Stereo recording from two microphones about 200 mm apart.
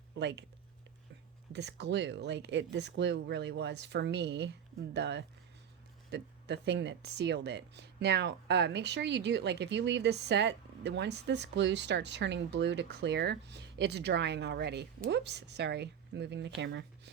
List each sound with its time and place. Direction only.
0.2 s speech: 60° right (ahead or behind)
1.5 s speech: 60° right (ahead or behind)